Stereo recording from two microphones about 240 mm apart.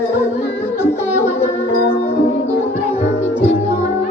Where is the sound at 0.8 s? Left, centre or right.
Left.